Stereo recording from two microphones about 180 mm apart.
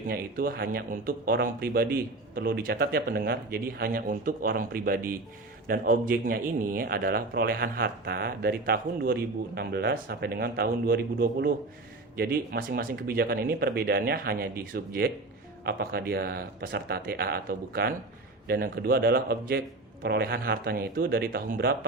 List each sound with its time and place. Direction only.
0.1 s a man's voice: 55° right (ahead or behind)